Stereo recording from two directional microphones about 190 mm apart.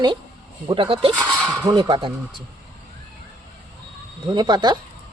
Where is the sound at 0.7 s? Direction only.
30° right (ahead or behind).